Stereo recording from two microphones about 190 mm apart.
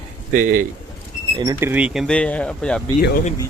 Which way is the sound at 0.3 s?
45° right (ahead or behind).